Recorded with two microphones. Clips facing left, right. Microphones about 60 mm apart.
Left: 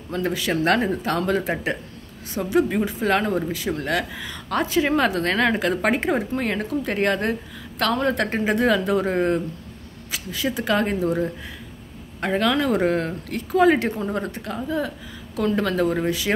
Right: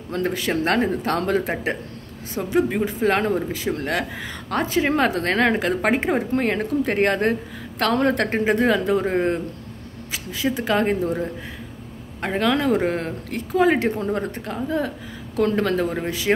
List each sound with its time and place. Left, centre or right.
0.1 s speech: right
0.5 s speech: right
1.0 s speech: right
12.4 s speech: right